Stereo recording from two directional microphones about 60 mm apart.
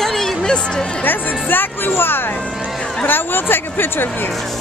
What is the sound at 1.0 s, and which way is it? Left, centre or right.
Speech, left.